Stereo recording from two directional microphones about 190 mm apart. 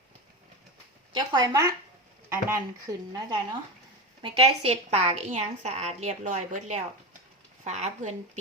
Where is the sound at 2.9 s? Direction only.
20° right (ahead or behind).